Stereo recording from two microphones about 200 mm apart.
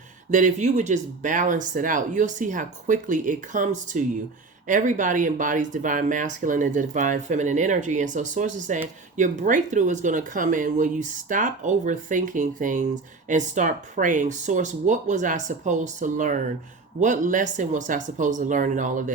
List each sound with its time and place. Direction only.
0.3 s speech: 40° right (ahead or behind)